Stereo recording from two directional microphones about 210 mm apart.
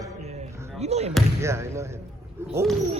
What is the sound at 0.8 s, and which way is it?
Speech, 30° right (ahead or behind).